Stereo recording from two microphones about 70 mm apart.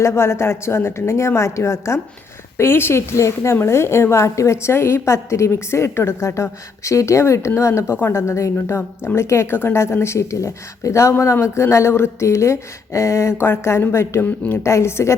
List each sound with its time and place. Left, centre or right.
0.0 s a woman's voice: left
14.2 s speech: left
14.6 s a woman's voice: left